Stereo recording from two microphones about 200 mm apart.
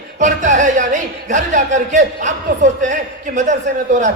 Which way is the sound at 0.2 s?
40° right (ahead or behind).